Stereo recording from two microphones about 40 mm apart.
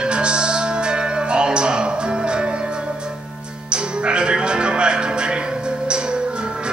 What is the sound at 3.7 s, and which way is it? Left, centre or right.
Music, right.